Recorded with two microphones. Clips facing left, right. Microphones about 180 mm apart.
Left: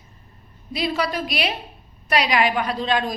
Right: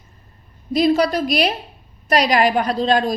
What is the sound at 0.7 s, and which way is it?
A woman's voice, 40° right (ahead or behind).